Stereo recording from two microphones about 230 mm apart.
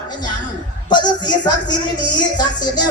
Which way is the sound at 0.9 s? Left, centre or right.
Centre.